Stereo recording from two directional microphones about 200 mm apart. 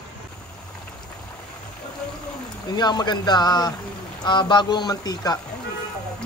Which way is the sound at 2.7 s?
20° left (ahead or behind).